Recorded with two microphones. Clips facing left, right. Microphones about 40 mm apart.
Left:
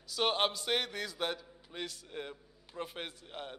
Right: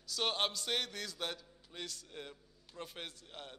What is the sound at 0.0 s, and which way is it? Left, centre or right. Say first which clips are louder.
A man's voice: left 4 dB; centre.